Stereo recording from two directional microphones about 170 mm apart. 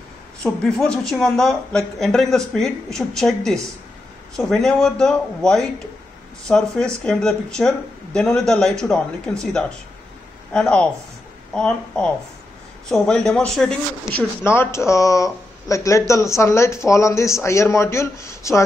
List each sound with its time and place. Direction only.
0.4 s speech: 5° left (ahead or behind)
14.4 s speech: 15° left (ahead or behind)